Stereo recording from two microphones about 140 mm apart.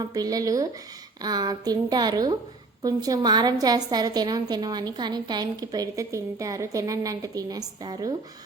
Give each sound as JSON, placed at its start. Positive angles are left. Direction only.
{"t": 0.0, "sound": "a woman's voice", "side_deg": -25}